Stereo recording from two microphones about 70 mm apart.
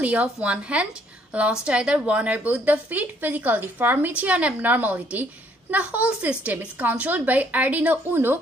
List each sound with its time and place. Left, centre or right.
0.0 s a woman's voice: centre